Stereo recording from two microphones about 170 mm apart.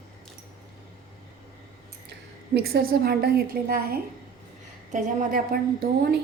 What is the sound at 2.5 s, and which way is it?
A woman's voice, 65° right (ahead or behind).